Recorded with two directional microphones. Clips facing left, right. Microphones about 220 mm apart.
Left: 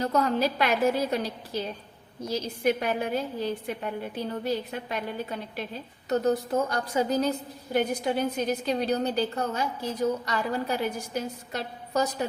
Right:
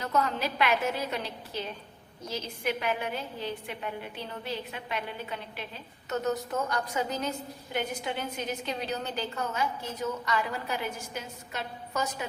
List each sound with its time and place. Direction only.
0.0 s a woman's voice: 35° left (ahead or behind)